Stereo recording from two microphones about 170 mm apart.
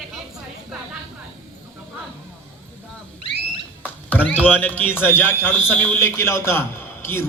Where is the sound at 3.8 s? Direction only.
10° left (ahead or behind).